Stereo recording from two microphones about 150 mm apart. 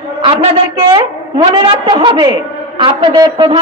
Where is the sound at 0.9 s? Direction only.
30° right (ahead or behind).